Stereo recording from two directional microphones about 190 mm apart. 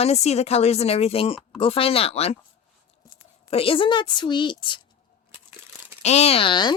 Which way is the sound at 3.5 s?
30° left (ahead or behind).